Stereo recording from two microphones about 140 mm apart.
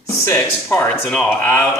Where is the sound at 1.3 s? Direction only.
15° left (ahead or behind).